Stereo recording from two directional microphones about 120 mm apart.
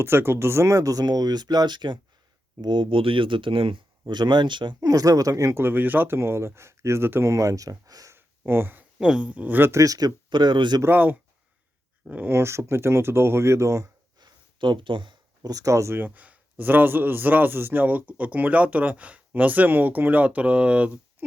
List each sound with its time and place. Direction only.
0.0 s speech: 20° right (ahead or behind)
8.1 s a sound: 20° right (ahead or behind)
9.0 s speech: 10° right (ahead or behind); by 10.8 s 40° right (ahead or behind)
10.8 s speech: 15° right (ahead or behind); by 15.2 s 40° right (ahead or behind)
15.4 s speech: 30° right (ahead or behind); by 21.2 s 10° right (ahead or behind)